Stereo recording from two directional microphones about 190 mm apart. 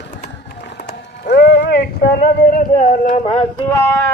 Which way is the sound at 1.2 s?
55° left (ahead or behind).